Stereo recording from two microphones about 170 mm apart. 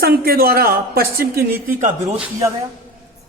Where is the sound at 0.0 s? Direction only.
65° right (ahead or behind).